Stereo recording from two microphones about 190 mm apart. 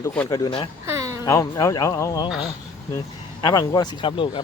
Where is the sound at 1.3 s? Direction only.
15° left (ahead or behind).